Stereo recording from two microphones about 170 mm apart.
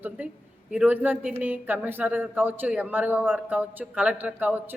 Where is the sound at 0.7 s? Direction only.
10° right (ahead or behind).